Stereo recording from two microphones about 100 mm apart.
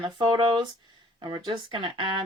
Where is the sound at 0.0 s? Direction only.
50° right (ahead or behind).